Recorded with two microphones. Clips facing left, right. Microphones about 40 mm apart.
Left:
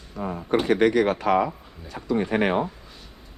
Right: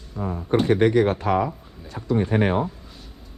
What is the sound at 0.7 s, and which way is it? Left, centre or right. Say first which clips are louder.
Speech: right 1 dB; left.